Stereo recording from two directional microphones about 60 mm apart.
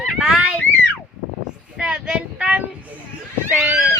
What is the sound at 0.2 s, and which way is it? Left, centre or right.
Speech, centre.